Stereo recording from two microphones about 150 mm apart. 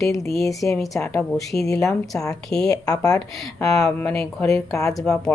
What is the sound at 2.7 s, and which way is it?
Speech, 25° left (ahead or behind).